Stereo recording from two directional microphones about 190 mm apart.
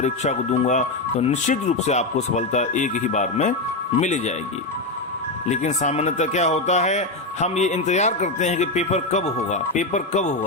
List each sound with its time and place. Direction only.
0.0 s speech: 35° left (ahead or behind)
5.5 s speech: 35° left (ahead or behind)